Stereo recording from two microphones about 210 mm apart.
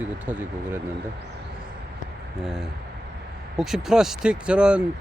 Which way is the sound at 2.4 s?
Centre (ahead or behind).